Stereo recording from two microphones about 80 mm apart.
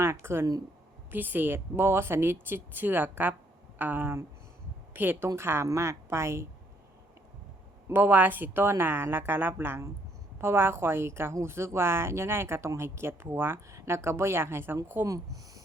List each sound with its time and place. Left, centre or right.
0.0 s speech: right
7.9 s speech: right
15.0 s speech: right